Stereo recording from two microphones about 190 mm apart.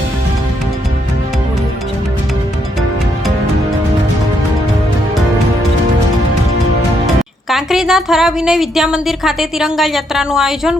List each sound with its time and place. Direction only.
7.5 s a woman's voice: centre (ahead or behind)